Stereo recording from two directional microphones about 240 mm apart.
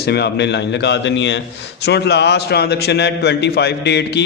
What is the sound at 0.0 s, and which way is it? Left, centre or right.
A man's voice, left.